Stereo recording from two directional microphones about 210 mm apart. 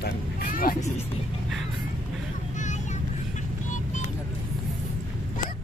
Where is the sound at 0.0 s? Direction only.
45° left (ahead or behind).